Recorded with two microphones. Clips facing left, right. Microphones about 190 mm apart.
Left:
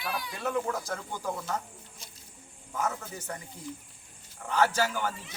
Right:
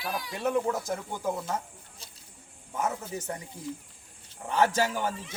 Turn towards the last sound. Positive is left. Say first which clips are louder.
# right 2 dB
turn(degrees=-25)  # may be behind; listen again after turning